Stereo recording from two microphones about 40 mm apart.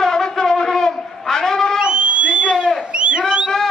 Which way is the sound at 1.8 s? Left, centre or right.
Right.